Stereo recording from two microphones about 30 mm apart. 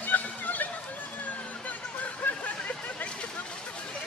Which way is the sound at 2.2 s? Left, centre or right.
Left.